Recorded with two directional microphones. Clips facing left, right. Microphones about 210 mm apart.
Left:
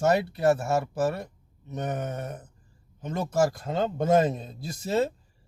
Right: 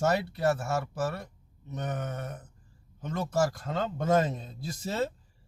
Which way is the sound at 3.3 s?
15° left (ahead or behind).